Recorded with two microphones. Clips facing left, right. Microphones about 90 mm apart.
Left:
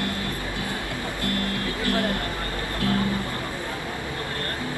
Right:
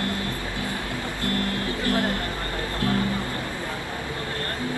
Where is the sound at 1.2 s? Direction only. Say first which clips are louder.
Right 1 dB; 25° right (ahead or behind).